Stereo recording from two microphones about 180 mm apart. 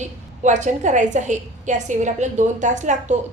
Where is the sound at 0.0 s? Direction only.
40° right (ahead or behind).